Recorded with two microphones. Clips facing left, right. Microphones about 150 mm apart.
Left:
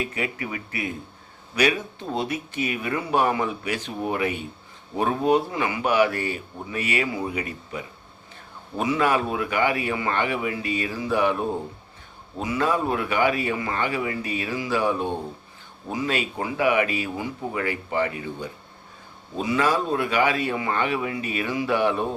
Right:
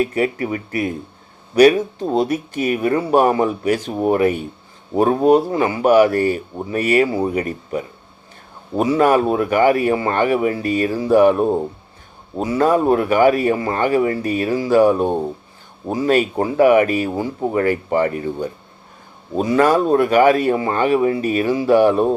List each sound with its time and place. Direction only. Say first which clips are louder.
0.0 s speech: right 10 dB; 40° right (ahead or behind)